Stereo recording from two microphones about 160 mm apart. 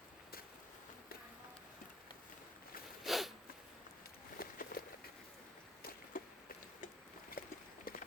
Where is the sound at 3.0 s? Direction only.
Centre (ahead or behind).